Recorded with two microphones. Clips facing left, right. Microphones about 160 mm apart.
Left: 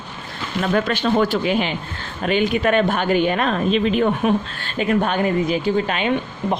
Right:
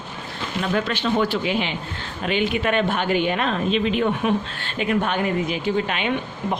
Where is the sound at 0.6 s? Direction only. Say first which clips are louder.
Left 4 dB; 50° left (ahead or behind).